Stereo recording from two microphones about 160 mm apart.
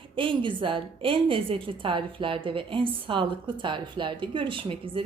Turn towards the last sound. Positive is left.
turn(degrees=-35)  # may be behind; listen again after turning